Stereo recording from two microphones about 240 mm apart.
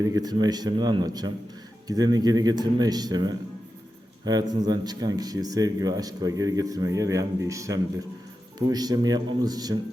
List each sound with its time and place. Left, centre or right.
0.0 s speech: centre